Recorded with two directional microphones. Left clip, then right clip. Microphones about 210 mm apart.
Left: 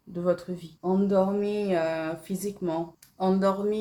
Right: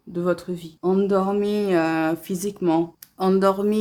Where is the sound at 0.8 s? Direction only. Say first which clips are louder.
Right 4 dB; 40° right (ahead or behind).